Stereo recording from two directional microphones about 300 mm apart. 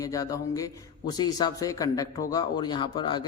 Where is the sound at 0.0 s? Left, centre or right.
Centre.